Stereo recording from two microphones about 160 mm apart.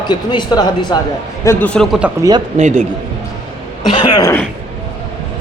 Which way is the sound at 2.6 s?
50° right (ahead or behind).